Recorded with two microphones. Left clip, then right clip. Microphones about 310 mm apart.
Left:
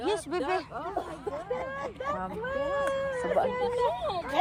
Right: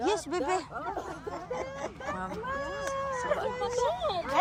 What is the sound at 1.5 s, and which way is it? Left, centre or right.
Hubbub, right.